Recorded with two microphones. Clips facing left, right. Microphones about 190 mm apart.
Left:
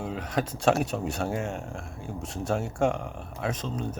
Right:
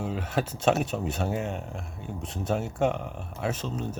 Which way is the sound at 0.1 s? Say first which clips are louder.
Right 1 dB; 25° right (ahead or behind).